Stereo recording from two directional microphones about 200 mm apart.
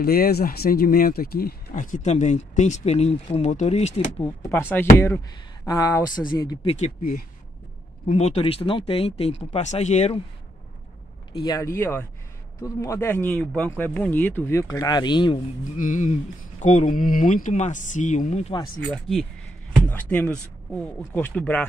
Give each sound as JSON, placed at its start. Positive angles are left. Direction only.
{"t": 0.0, "sound": "speech", "side_deg": 50}
{"t": 4.2, "sound": "speech", "side_deg": 15}
{"t": 11.3, "sound": "speech", "side_deg": 20}
{"t": 15.8, "sound": "speech", "side_deg": 40}
{"t": 18.9, "sound": "speech", "side_deg": 0}